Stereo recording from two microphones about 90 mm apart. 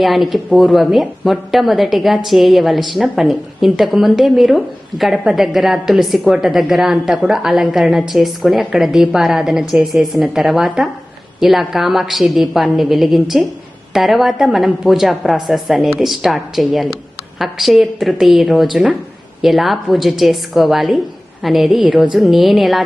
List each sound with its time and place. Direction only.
0.0 s a woman's voice: centre (ahead or behind)